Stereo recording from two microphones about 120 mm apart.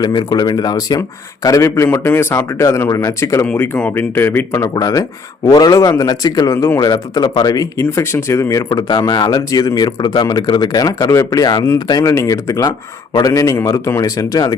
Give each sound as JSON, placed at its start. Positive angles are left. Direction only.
{"t": 0.0, "sound": "speech", "side_deg": 35}
{"t": 3.4, "sound": "speech", "side_deg": 15}
{"t": 4.7, "sound": "speech", "side_deg": 30}